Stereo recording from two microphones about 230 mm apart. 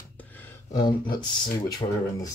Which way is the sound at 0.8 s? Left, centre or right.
Centre.